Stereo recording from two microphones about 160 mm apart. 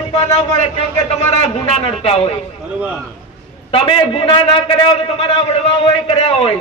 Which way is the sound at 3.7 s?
35° left (ahead or behind).